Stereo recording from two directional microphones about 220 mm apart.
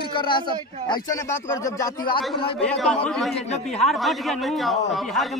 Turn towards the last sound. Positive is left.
turn(degrees=0)  # may be behind; listen again after turning